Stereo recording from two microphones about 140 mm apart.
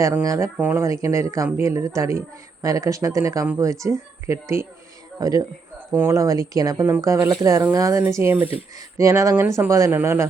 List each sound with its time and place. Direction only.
0.2 s speech: 20° right (ahead or behind)